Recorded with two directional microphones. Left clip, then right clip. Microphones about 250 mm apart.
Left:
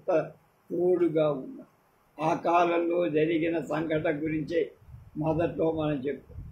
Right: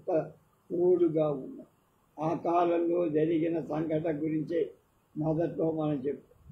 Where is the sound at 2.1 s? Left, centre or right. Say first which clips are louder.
Left 4 dB; left.